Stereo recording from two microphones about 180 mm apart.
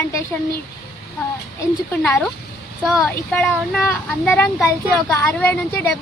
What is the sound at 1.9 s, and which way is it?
A child's voice, 10° left (ahead or behind).